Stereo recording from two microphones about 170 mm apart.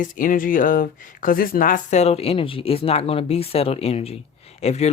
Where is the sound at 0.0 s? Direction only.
55° left (ahead or behind).